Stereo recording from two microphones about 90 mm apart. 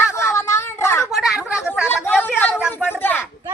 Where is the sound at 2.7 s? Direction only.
20° left (ahead or behind).